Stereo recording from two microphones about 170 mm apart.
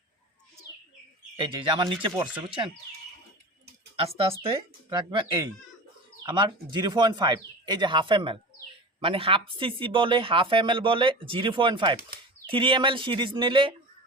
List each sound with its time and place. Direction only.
1.4 s speech: 30° right (ahead or behind)
3.9 s speech: 35° right (ahead or behind)